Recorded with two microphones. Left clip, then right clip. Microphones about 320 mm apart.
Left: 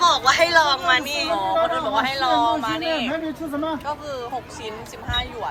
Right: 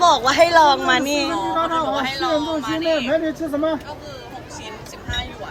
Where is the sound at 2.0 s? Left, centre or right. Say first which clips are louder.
Left 2 dB; centre.